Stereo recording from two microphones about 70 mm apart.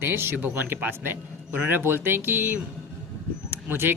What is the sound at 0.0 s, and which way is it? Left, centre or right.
Speech, right.